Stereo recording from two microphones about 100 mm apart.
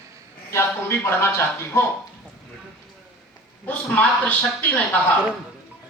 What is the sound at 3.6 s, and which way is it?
A man's voice, 15° left (ahead or behind).